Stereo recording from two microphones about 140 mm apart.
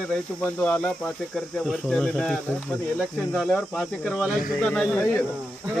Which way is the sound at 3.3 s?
5° left (ahead or behind).